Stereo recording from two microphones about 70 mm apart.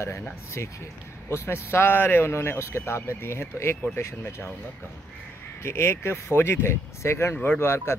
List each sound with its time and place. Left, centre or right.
0.6 s speech: left
5.6 s speech: left